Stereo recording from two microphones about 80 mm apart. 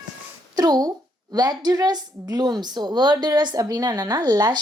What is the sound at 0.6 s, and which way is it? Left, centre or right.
Speech, right.